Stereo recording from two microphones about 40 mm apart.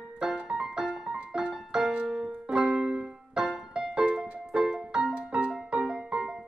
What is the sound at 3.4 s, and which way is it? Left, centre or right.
Music, centre.